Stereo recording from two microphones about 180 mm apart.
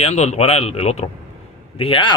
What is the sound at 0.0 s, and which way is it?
Speech, 35° left (ahead or behind).